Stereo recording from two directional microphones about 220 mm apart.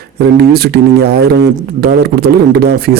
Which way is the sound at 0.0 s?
45° right (ahead or behind).